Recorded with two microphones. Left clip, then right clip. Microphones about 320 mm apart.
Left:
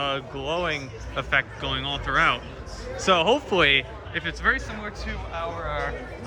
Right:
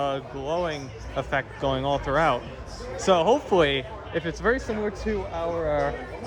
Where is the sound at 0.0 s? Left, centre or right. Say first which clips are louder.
Even; centre.